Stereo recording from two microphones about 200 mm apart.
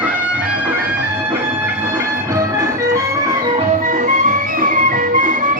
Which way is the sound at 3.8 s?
40° right (ahead or behind).